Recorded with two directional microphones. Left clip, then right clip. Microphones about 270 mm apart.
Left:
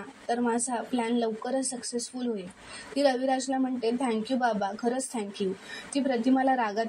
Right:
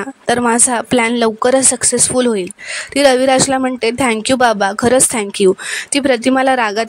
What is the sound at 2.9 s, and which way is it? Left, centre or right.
Speech, right.